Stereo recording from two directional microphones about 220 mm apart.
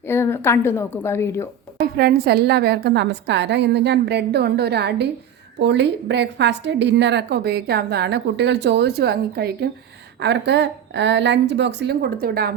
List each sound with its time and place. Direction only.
0.1 s a woman's voice: 10° left (ahead or behind)
1.8 s a woman's voice: 45° right (ahead or behind)